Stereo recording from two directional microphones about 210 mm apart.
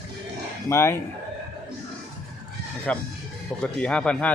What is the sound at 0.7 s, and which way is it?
Speech, 15° left (ahead or behind).